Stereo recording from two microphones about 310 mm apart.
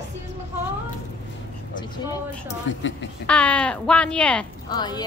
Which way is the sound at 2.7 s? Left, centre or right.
Left.